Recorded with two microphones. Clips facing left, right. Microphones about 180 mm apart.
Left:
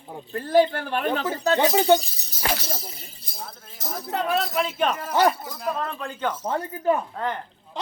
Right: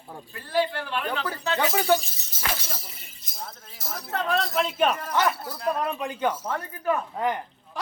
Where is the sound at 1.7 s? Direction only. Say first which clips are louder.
Left 3 dB; 20° left (ahead or behind).